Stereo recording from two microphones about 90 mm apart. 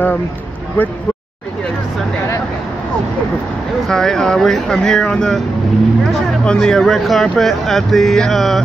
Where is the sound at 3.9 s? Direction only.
5° left (ahead or behind).